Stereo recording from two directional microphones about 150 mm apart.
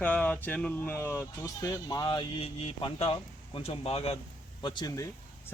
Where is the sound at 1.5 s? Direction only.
25° left (ahead or behind); by 4.2 s 45° left (ahead or behind).